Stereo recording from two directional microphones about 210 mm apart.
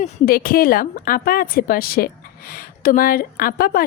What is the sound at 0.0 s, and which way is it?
A woman's voice, 45° left (ahead or behind).